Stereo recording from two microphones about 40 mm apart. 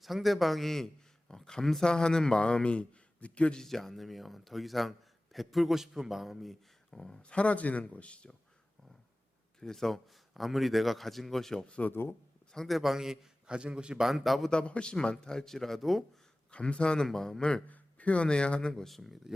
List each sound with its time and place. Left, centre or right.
0.0 s a man's voice: centre; by 3.6 s left
3.6 s a man's voice: centre
6.9 s speech: centre
7.2 s speech: left
9.6 s a man's voice: centre
11.9 s speech: left
12.5 s a man's voice: centre
13.5 s a man's voice: right
14.0 s a man's voice: centre
14.5 s a man's voice: left; by 16.0 s centre
16.5 s speech: left
17.0 s speech: centre
17.7 s speech: left
18.7 s a man's voice: centre